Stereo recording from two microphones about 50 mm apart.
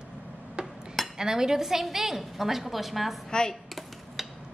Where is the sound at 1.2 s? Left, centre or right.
Centre.